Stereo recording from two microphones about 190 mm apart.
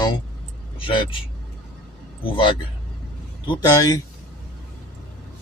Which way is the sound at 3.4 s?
20° left (ahead or behind).